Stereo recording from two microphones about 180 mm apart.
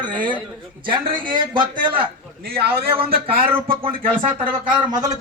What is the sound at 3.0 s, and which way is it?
Speech, 30° right (ahead or behind).